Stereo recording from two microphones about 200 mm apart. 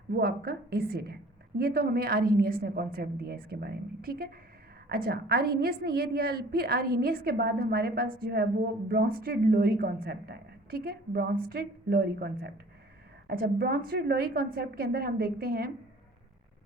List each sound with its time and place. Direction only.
0.1 s a woman's voice: 50° right (ahead or behind)